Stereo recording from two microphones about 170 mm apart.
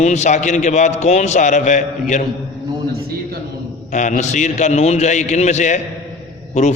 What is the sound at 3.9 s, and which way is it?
A man's voice, 45° left (ahead or behind).